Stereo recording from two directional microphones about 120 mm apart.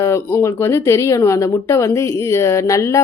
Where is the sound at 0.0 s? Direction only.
20° left (ahead or behind).